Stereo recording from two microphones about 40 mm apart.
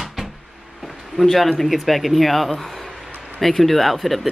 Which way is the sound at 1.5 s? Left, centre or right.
Centre.